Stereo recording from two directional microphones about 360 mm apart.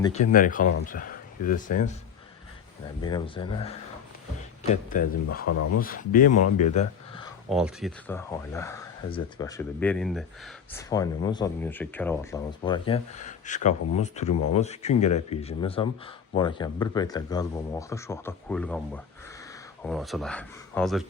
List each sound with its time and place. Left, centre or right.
0.0 s speech: centre
3.0 s speech: centre
4.7 s speech: left
5.5 s speech: left
5.8 s speech: left
7.5 s speech: centre